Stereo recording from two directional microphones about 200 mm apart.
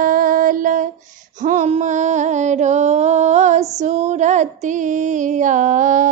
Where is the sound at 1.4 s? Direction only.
35° right (ahead or behind).